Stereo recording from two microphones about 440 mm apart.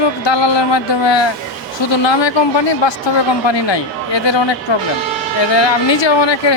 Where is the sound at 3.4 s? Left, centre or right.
Left.